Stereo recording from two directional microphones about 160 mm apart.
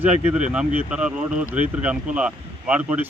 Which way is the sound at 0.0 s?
10° right (ahead or behind).